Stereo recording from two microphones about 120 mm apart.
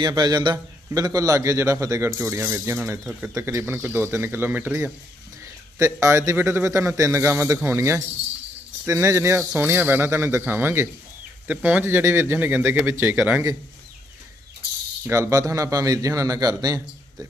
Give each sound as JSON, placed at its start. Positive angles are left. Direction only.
{"t": 0.0, "sound": "a man's voice", "side_deg": -35}
{"t": 15.0, "sound": "a man's voice", "side_deg": -25}